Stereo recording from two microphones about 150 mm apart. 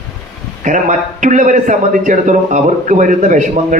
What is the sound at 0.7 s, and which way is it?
A man's voice, 55° right (ahead or behind).